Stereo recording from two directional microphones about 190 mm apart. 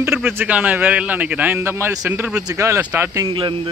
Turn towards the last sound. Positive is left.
turn(degrees=-25)  # may be behind; listen again after turning